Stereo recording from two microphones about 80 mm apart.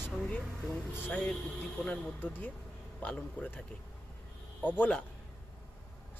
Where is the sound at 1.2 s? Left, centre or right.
Centre.